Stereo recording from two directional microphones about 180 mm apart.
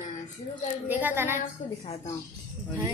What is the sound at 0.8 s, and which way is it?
Speech, 10° right (ahead or behind).